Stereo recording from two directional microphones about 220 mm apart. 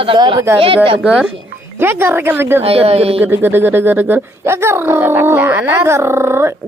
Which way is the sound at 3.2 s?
10° right (ahead or behind).